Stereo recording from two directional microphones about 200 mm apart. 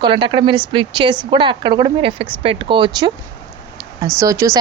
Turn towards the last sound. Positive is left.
turn(degrees=-15)  # may be behind; listen again after turning